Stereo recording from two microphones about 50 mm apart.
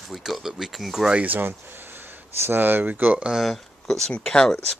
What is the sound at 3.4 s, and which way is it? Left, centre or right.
Speech, centre.